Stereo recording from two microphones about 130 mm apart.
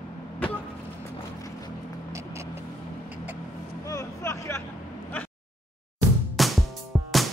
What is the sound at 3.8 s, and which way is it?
Vehicle, 25° left (ahead or behind).